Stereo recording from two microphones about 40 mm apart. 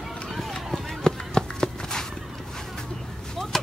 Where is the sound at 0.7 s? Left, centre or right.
Centre.